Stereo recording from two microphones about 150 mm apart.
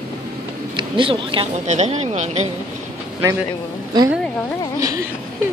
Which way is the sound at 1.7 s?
50° right (ahead or behind).